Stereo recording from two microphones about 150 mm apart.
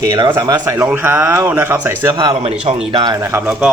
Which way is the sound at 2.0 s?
25° right (ahead or behind).